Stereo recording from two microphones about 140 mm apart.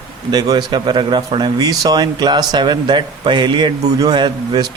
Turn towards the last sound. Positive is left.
turn(degrees=-30)  # may be behind; listen again after turning